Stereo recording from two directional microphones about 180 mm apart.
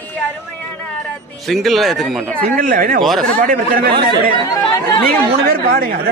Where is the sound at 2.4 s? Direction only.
50° right (ahead or behind).